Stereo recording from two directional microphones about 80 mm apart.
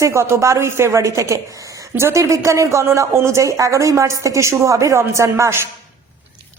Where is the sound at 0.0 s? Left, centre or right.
Right.